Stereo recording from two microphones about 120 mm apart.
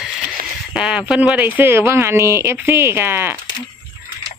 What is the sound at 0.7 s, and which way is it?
Speech, 5° right (ahead or behind).